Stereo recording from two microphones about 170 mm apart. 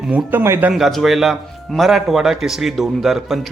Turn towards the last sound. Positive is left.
turn(degrees=0)  # may be behind; listen again after turning